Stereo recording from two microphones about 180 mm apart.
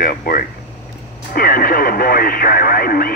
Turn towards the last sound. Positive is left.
turn(degrees=55)  # may be behind; listen again after turning